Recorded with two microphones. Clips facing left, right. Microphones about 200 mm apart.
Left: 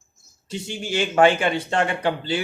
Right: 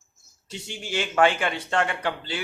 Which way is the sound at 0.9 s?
30° left (ahead or behind).